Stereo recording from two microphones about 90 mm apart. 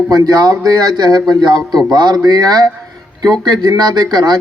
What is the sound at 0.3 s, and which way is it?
A man's voice, 50° right (ahead or behind).